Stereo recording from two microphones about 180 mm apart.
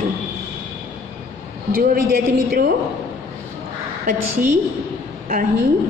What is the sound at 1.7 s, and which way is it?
A woman's voice, 50° right (ahead or behind).